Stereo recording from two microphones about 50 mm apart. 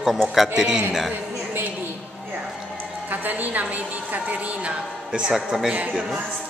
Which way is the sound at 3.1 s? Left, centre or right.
Right.